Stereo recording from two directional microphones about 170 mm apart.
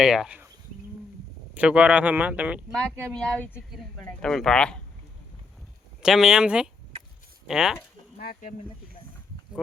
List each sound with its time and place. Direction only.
0.0 s speech: 5° right (ahead or behind)
1.5 s speech: 5° right (ahead or behind)
2.7 s speech: 5° left (ahead or behind)
6.0 s speech: 5° right (ahead or behind)
8.2 s speech: 55° left (ahead or behind)